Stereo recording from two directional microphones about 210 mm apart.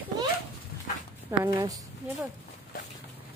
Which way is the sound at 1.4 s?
15° right (ahead or behind).